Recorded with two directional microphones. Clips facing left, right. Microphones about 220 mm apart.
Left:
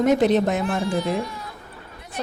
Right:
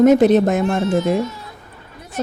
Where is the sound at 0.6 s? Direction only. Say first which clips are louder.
Right 6 dB; 25° right (ahead or behind).